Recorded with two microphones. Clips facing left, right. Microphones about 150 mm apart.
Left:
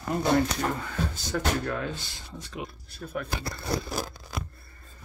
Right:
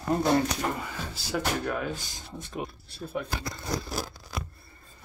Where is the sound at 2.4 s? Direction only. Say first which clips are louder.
Right 3 dB; 30° right (ahead or behind).